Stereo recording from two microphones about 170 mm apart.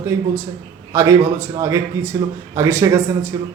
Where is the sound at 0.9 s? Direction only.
20° right (ahead or behind).